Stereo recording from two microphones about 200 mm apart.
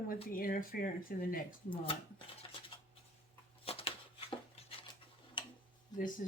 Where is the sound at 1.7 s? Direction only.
25° left (ahead or behind).